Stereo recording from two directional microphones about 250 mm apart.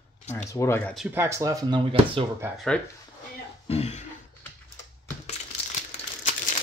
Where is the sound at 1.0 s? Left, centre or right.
Centre.